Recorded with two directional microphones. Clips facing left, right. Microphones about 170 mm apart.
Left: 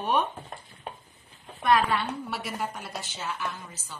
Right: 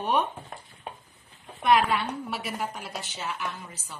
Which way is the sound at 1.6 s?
20° right (ahead or behind).